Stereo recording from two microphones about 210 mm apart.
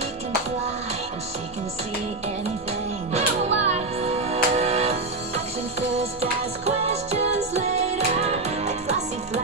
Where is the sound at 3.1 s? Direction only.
30° right (ahead or behind).